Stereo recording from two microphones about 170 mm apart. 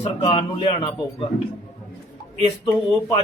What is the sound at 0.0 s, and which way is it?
Speech, 30° left (ahead or behind).